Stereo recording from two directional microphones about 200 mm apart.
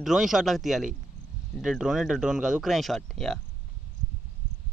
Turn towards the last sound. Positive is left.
turn(degrees=0)  # may be behind; listen again after turning